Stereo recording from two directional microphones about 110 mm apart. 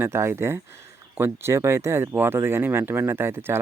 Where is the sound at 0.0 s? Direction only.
25° right (ahead or behind).